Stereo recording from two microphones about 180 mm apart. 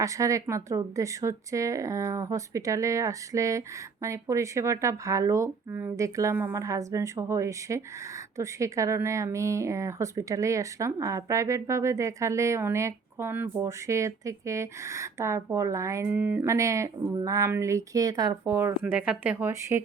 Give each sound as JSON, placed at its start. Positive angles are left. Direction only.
{"t": 0.0, "sound": "speech", "side_deg": -15}